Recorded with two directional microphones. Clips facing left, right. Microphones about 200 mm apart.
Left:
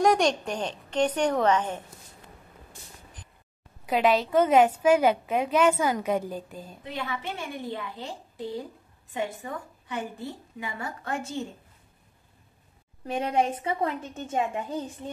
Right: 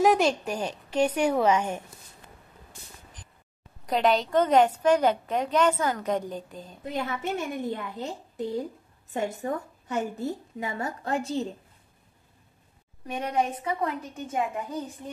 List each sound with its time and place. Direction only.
0.0 s a woman's voice: 5° right (ahead or behind)
3.8 s a woman's voice: 5° left (ahead or behind)
6.8 s a woman's voice: 45° right (ahead or behind)
13.0 s a woman's voice: 30° left (ahead or behind)